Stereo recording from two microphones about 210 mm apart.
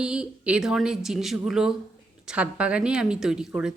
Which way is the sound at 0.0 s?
5° right (ahead or behind).